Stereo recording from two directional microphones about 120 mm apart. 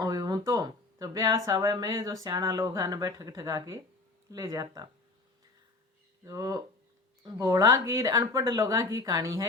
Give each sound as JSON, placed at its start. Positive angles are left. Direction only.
{"t": 0.0, "sound": "speech", "side_deg": -30}
{"t": 6.2, "sound": "speech", "side_deg": -30}